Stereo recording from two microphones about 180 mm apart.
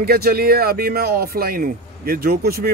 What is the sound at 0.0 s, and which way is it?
Speech, 60° right (ahead or behind).